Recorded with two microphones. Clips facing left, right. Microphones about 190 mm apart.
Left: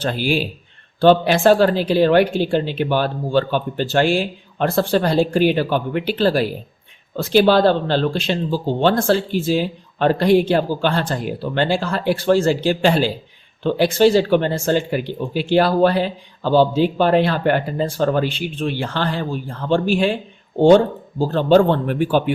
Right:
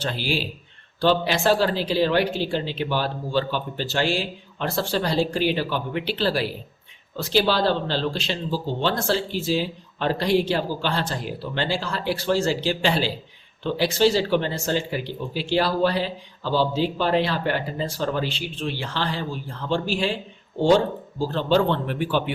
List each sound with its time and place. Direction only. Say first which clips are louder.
0.0 s speech: left 6 dB; 50° left (ahead or behind)